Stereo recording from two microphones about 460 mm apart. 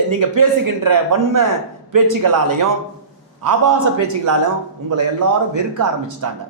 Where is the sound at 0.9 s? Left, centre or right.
Right.